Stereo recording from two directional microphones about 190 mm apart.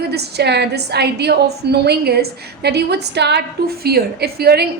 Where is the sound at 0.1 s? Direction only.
60° right (ahead or behind).